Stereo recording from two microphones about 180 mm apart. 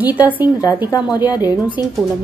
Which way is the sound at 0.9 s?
20° left (ahead or behind).